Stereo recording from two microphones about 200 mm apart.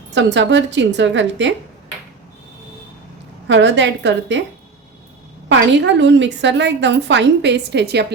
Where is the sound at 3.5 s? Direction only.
65° right (ahead or behind).